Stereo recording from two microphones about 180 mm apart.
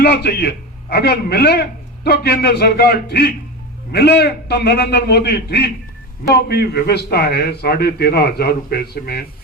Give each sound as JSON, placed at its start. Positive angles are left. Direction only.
{"t": 0.0, "sound": "a man's voice", "side_deg": 65}